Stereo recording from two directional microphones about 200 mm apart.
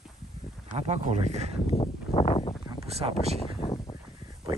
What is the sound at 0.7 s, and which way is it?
Speech, 35° right (ahead or behind).